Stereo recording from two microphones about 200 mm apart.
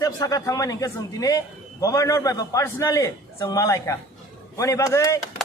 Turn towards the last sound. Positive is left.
turn(degrees=15)  # may be behind; listen again after turning